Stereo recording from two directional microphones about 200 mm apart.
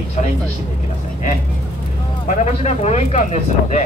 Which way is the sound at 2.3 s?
35° left (ahead or behind).